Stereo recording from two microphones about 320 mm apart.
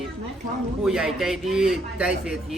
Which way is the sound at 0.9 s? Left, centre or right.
Centre.